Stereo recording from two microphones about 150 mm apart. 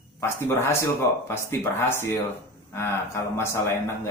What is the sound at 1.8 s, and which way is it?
A man's voice, 15° left (ahead or behind).